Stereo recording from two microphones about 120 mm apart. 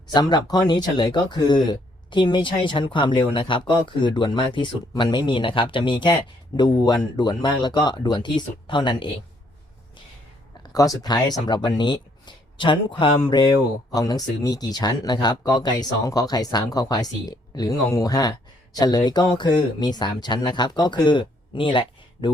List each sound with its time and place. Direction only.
0.1 s speech: 35° left (ahead or behind)
10.6 s speech: 30° left (ahead or behind)
13.9 s speech: 30° left (ahead or behind)